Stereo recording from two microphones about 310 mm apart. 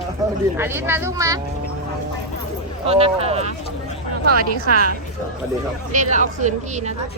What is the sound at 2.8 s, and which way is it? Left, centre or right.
Speech, centre.